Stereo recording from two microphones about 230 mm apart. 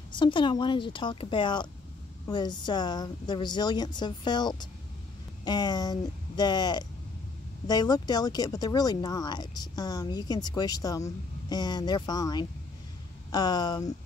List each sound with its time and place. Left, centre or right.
0.1 s a woman's voice: left